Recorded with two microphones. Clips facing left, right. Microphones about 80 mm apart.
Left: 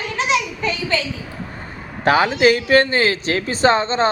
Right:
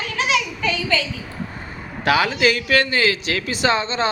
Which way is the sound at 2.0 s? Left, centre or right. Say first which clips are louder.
Left 4 dB; left.